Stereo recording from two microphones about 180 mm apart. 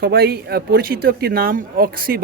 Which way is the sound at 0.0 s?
60° right (ahead or behind).